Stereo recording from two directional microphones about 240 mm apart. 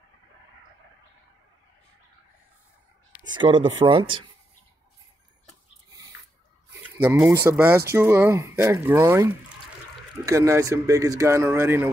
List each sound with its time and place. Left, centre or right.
3.3 s speech: centre
7.0 s speech: centre